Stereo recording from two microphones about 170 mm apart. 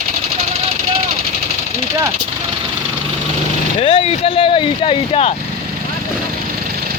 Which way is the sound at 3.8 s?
35° left (ahead or behind).